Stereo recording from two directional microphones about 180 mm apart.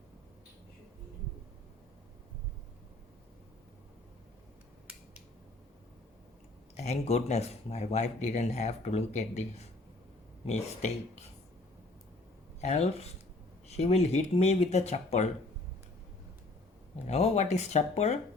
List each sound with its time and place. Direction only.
6.7 s speech: 35° left (ahead or behind)
12.6 s speech: 35° left (ahead or behind)
17.1 s speech: 35° left (ahead or behind)